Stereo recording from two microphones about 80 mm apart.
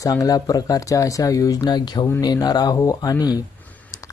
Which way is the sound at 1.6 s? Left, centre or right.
Left.